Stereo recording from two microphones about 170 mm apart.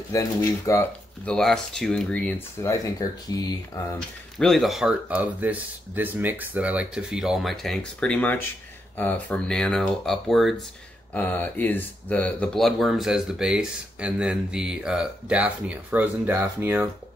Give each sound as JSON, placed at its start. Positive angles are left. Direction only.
{"t": 0.1, "sound": "speech", "side_deg": 20}
{"t": 1.3, "sound": "speech", "side_deg": 5}
{"t": 4.4, "sound": "speech", "side_deg": 0}
{"t": 11.1, "sound": "speech", "side_deg": 10}